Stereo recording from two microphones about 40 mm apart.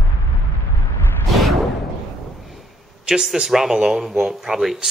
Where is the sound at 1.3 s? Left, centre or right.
Centre.